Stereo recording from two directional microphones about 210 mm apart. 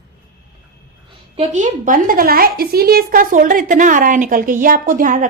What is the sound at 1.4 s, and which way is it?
A woman's voice, 35° right (ahead or behind).